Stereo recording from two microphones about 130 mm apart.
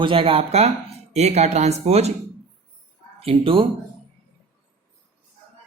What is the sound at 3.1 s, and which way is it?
Speech, 45° right (ahead or behind).